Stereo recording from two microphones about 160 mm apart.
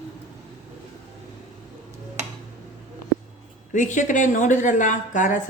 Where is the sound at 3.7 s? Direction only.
50° left (ahead or behind).